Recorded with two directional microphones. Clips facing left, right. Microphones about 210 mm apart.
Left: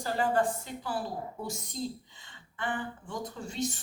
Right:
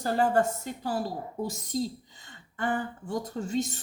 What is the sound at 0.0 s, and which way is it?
Speech, 45° right (ahead or behind).